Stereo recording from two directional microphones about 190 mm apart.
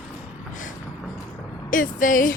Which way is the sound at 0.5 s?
40° left (ahead or behind).